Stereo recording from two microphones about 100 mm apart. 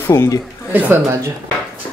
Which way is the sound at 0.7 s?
20° right (ahead or behind).